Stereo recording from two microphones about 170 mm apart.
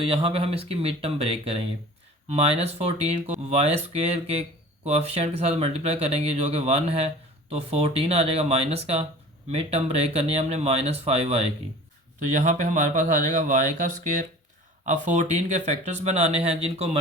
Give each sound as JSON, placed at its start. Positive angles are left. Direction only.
{"t": 0.0, "sound": "speech", "side_deg": -30}